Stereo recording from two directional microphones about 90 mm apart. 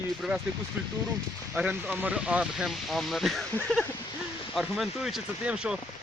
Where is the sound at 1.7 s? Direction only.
20° right (ahead or behind); by 3.4 s centre (ahead or behind).